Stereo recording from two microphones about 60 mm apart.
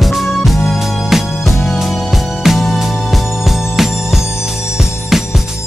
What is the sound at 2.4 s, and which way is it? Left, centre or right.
Music, centre.